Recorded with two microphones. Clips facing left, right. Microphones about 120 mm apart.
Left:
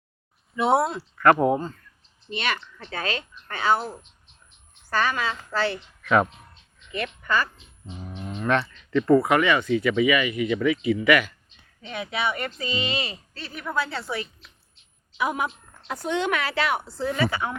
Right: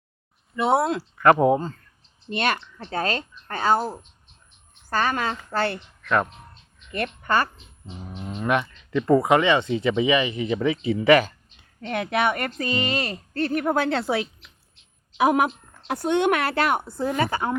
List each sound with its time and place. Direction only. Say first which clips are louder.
0.5 s speech: even; centre (ahead or behind)
1.2 s speech: right 1 dB; 20° right (ahead or behind)
2.3 s a woman's voice: right 4 dB; 50° right (ahead or behind)
2.7 s a woman's voice: right 4 dB; 35° right (ahead or behind); by 5.8 s 55° right (ahead or behind)
6.0 s music: left 2 dB; 5° left (ahead or behind)
6.9 s speech: right 2 dB; 55° right (ahead or behind)
8.4 s speech: even; 15° right (ahead or behind); by 11.3 s 30° right (ahead or behind)
11.8 s speech: right 5 dB; 60° right (ahead or behind); by 14.3 s 80° right
15.2 s speech: right 7 dB; 90° right; by 17.5 s 45° right (ahead or behind)